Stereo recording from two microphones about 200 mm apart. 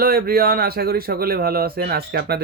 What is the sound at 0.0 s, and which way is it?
Speech, 50° right (ahead or behind).